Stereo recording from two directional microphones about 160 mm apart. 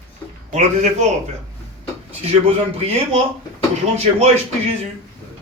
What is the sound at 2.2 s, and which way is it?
A man's voice, 40° right (ahead or behind).